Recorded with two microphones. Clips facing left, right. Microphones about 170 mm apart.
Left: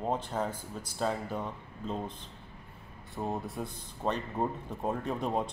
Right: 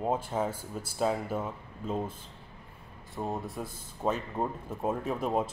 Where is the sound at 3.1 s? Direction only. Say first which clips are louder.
Even; centre (ahead or behind).